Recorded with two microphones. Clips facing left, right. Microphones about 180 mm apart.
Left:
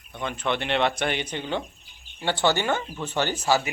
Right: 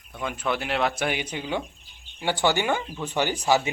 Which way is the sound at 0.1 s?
5° right (ahead or behind).